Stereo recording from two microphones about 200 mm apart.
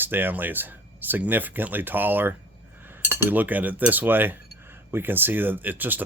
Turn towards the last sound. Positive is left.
turn(degrees=-10)  # may be behind; listen again after turning